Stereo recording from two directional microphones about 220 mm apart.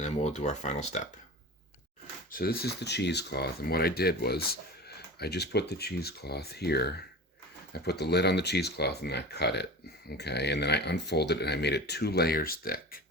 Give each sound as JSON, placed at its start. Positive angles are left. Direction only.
{"t": 0.0, "sound": "speech", "side_deg": 30}
{"t": 2.3, "sound": "speech", "side_deg": 45}